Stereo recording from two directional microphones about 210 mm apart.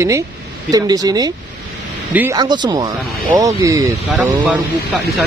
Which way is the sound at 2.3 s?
20° right (ahead or behind).